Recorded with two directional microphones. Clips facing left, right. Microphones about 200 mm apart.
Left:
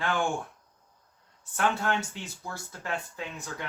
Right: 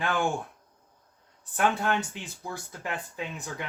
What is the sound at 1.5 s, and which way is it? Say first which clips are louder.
Speech: right 2 dB; 15° right (ahead or behind).